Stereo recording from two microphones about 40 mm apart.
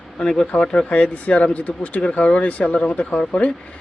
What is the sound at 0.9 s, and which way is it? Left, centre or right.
Speech, left.